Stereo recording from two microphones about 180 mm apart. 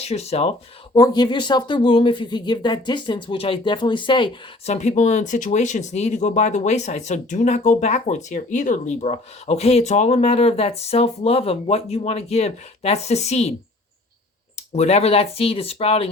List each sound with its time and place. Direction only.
0.0 s speech: 35° left (ahead or behind)
0.9 s speech: 20° left (ahead or behind)
4.7 s speech: 40° left (ahead or behind)
14.7 s speech: 35° left (ahead or behind)